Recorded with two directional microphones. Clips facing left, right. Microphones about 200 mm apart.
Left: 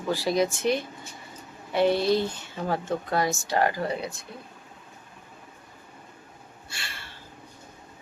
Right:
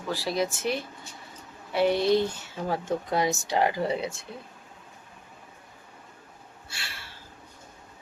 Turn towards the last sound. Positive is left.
turn(degrees=-5)  # may be behind; listen again after turning